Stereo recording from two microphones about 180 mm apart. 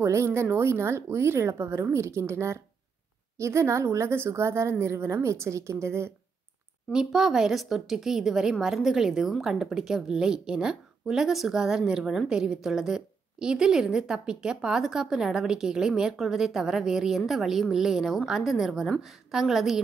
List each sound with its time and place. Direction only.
0.0 s speech: 15° right (ahead or behind)
6.9 s speech: 5° right (ahead or behind)